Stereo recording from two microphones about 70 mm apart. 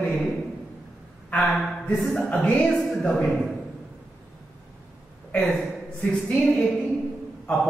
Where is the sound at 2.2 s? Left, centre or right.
Centre.